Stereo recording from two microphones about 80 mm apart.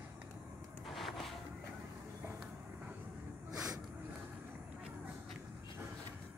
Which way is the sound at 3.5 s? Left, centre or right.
Right.